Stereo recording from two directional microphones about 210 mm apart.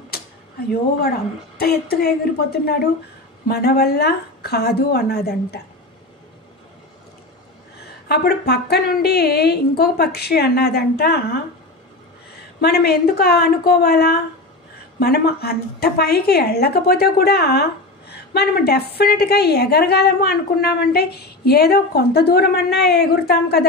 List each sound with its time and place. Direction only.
1.6 s a woman's voice: 50° left (ahead or behind)
8.1 s a woman's voice: 50° left (ahead or behind)
12.5 s a woman's voice: 50° left (ahead or behind)